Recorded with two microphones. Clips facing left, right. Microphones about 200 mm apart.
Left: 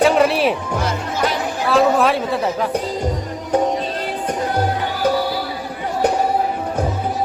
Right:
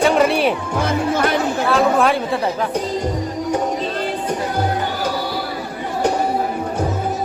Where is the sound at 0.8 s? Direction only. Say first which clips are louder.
Right 6 dB; 55° right (ahead or behind).